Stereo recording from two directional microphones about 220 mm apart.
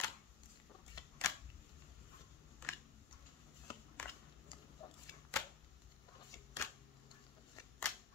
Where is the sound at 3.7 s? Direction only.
10° left (ahead or behind).